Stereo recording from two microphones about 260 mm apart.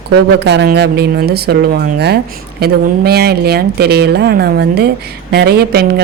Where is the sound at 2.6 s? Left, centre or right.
Right.